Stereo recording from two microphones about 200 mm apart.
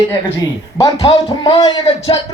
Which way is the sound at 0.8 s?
20° left (ahead or behind).